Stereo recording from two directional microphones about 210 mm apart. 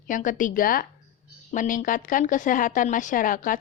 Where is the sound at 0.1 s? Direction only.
40° left (ahead or behind).